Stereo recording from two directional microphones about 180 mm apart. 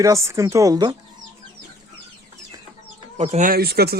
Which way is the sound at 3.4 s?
55° right (ahead or behind).